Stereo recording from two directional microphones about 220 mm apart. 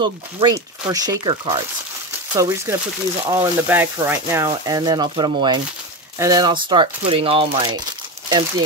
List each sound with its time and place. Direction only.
0.0 s speech: 20° right (ahead or behind)